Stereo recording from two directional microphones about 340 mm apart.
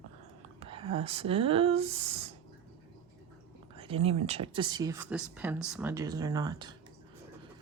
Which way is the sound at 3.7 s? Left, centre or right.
Centre.